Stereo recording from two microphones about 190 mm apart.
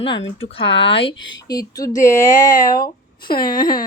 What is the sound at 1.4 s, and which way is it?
Speech, 20° left (ahead or behind).